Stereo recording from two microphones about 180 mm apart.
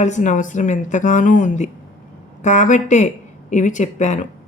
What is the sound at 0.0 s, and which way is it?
Speech, 40° left (ahead or behind).